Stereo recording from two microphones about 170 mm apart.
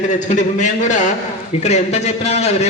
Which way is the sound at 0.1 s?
45° left (ahead or behind).